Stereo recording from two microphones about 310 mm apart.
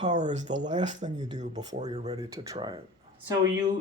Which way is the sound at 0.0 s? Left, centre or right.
Right.